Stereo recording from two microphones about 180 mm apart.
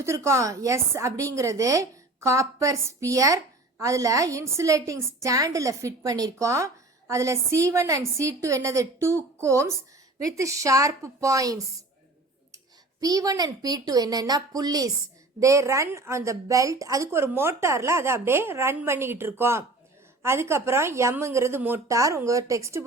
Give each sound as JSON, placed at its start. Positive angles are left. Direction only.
{"t": 0.0, "sound": "speech", "side_deg": -15}
{"t": 13.0, "sound": "a woman's voice", "side_deg": -20}